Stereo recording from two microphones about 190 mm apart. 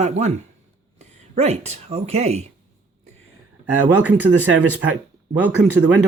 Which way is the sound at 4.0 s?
10° right (ahead or behind).